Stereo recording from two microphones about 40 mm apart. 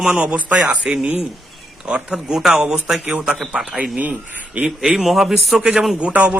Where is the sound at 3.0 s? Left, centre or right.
Right.